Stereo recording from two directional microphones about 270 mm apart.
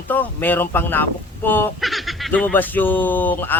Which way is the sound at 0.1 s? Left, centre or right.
Centre.